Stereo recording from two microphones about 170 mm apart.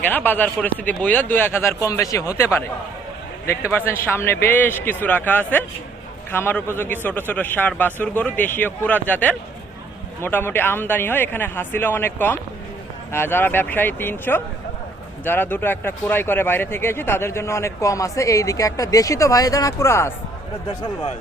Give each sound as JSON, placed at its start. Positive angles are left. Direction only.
{"t": 0.1, "sound": "speech", "side_deg": 10}